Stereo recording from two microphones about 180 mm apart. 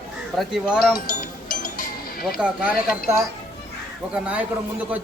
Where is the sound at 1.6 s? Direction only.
50° left (ahead or behind).